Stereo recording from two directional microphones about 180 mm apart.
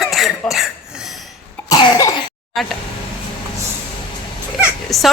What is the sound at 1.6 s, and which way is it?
Throat clearing, 20° left (ahead or behind).